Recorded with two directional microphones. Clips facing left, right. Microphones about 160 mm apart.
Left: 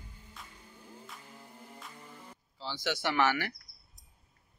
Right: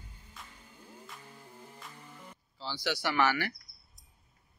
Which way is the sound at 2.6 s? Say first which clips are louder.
Even; 20° left (ahead or behind).